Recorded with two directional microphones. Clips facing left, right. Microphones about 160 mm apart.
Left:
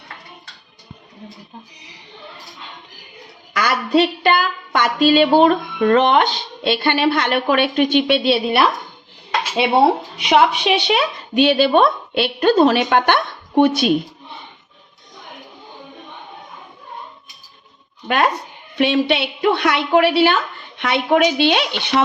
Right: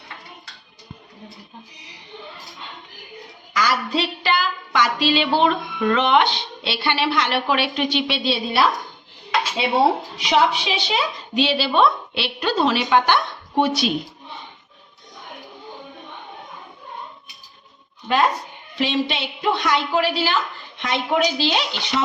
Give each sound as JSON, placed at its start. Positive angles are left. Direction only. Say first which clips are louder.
{"t": 3.5, "sound": "a woman's voice", "louder": "left 5 dB", "side_deg": 60}
{"t": 10.2, "sound": "a woman's voice", "louder": "left 6 dB", "side_deg": 60}
{"t": 18.1, "sound": "a woman's voice", "louder": "left 1 dB", "side_deg": 65}